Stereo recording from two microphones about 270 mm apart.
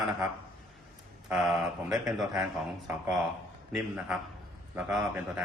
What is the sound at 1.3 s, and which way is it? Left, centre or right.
Speech, centre.